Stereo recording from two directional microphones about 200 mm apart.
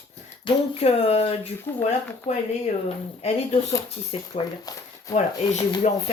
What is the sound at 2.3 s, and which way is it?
Speech, 35° left (ahead or behind).